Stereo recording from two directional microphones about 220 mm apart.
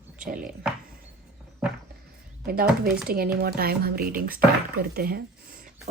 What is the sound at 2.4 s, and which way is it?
Speech, 40° right (ahead or behind).